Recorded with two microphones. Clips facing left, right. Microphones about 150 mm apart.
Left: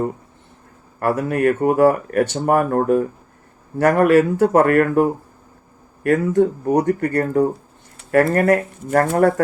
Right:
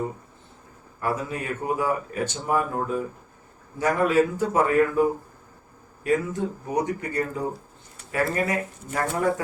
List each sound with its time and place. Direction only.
0.9 s speech: 65° left (ahead or behind)